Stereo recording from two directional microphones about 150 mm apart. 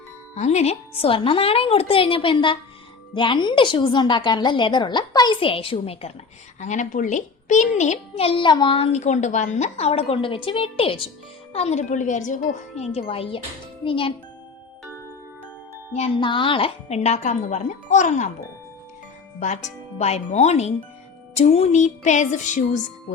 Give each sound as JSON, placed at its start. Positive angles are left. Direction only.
{"t": 0.3, "sound": "a woman's voice", "side_deg": 50}
{"t": 6.6, "sound": "a child's voice", "side_deg": 55}
{"t": 11.5, "sound": "a child's voice", "side_deg": 50}
{"t": 15.9, "sound": "a child's voice", "side_deg": 45}
{"t": 19.4, "sound": "a child's voice", "side_deg": 50}